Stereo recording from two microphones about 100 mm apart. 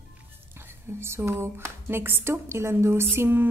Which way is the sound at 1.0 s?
25° right (ahead or behind).